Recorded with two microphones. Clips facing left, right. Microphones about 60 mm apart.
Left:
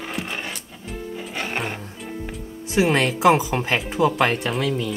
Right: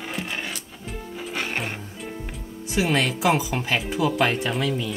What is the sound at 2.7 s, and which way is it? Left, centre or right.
Speech, left.